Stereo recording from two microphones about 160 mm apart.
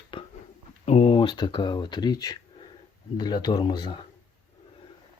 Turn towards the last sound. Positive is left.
turn(degrees=30)  # may be behind; listen again after turning